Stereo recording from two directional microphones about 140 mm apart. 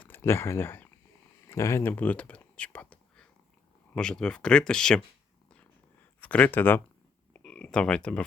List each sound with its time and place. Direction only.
0.1 s speech: 15° left (ahead or behind)
1.5 s whispering: 20° left (ahead or behind)
3.9 s speech: 5° left (ahead or behind)
6.1 s speech: 10° left (ahead or behind)